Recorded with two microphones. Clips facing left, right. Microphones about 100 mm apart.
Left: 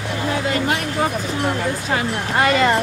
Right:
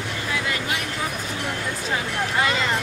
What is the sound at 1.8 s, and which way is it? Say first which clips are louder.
Speech: left 4 dB; 60° left (ahead or behind).